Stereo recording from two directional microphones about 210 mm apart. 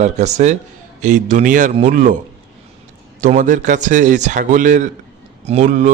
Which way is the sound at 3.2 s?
35° right (ahead or behind).